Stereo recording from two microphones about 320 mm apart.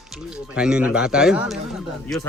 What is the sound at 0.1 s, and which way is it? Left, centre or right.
A man's voice, centre.